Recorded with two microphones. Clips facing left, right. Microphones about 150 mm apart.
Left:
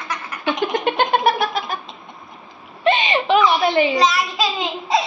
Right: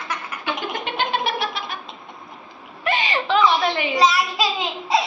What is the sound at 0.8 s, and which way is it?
Cat, 50° left (ahead or behind).